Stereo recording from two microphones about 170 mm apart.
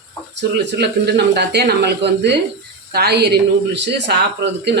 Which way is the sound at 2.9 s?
70° right (ahead or behind).